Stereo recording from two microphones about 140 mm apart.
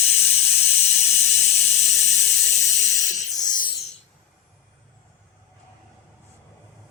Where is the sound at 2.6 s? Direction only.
60° left (ahead or behind).